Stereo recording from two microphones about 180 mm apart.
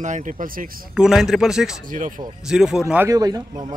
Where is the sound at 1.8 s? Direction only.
50° right (ahead or behind).